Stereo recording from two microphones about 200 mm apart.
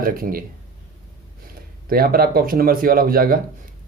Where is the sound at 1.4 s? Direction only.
45° right (ahead or behind).